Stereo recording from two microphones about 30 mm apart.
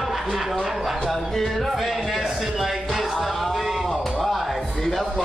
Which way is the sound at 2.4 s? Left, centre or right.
Centre.